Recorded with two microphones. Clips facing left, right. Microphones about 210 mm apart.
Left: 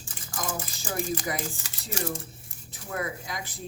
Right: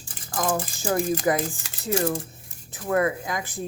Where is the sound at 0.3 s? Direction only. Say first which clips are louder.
Right 8 dB; 55° right (ahead or behind).